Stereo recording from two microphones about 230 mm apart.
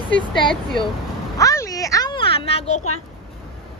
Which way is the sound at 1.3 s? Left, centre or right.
Centre.